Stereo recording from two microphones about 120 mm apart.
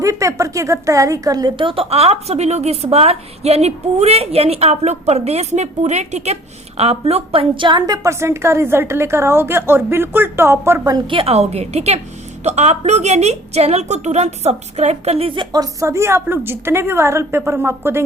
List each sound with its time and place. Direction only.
0.0 s a woman's voice: 25° right (ahead or behind); by 6.3 s 70° right (ahead or behind)
6.7 s a woman's voice: 60° right (ahead or behind); by 10.8 s 20° right (ahead or behind)
10.8 s a woman's voice: 40° right (ahead or behind); by 15.3 s 60° right (ahead or behind)
15.4 s a woman's voice: 30° right (ahead or behind)